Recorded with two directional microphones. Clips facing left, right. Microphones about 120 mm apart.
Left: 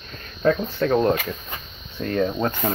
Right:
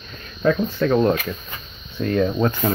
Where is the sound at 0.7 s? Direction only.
30° left (ahead or behind).